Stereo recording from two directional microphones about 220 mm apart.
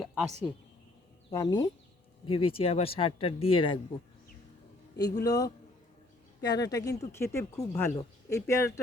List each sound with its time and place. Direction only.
0.0 s a sound: centre (ahead or behind)
1.3 s speech: 15° left (ahead or behind)
5.2 s speech: 15° left (ahead or behind)